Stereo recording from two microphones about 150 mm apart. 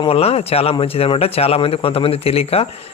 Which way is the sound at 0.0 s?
40° left (ahead or behind).